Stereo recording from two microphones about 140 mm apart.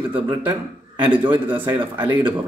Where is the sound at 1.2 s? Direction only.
35° right (ahead or behind).